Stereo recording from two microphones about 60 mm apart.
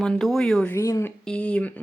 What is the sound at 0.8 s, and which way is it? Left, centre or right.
Speech, left.